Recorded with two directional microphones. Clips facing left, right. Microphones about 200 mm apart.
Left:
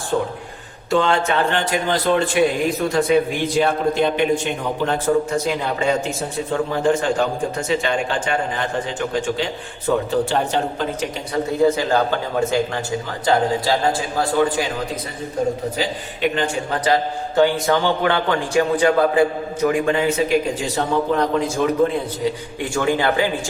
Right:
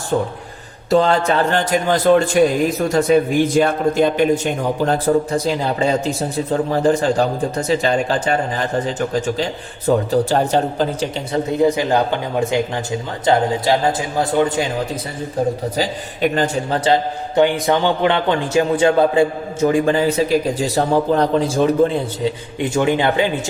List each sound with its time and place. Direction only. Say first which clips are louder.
0.9 s a man's voice: right 3 dB; 35° right (ahead or behind)
11.4 s a man's voice: right 1 dB; 20° right (ahead or behind)
15.8 s a man's voice: right 4 dB; 40° right (ahead or behind)
16.8 s a man's voice: even; 20° right (ahead or behind)
22.2 s a man's voice: right 2 dB; 20° right (ahead or behind)